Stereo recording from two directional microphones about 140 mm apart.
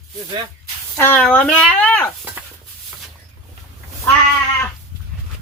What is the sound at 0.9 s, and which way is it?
Speech, 15° left (ahead or behind).